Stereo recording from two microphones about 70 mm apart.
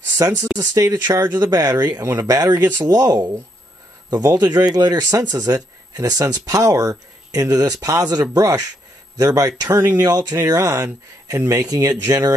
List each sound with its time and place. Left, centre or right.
0.2 s speech: right
0.6 s speech: right